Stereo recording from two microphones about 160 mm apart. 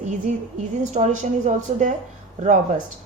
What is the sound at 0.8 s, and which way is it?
A woman's voice, 45° right (ahead or behind).